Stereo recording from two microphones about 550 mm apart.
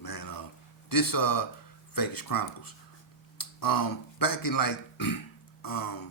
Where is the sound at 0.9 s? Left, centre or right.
Left.